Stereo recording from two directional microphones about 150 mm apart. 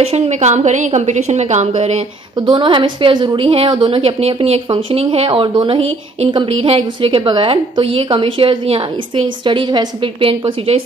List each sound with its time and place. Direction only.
0.0 s a woman's voice: 45° right (ahead or behind)
2.4 s a woman's voice: 30° right (ahead or behind)